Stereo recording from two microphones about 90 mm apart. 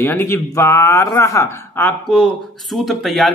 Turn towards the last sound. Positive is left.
turn(degrees=0)  # may be behind; listen again after turning